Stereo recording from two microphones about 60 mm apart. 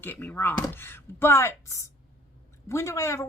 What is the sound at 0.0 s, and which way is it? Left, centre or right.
Speech, left.